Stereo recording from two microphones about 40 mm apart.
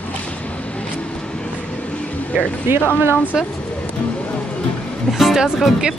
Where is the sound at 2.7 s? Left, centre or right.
Right.